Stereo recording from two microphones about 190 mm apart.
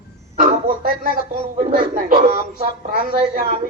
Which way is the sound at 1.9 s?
45° right (ahead or behind).